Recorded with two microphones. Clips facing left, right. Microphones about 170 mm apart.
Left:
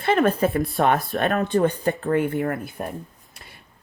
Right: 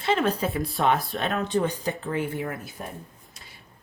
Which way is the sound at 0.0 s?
55° left (ahead or behind).